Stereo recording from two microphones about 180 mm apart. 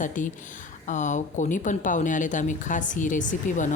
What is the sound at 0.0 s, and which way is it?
Speech, 45° left (ahead or behind).